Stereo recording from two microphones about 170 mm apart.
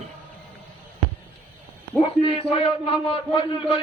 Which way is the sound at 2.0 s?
35° left (ahead or behind).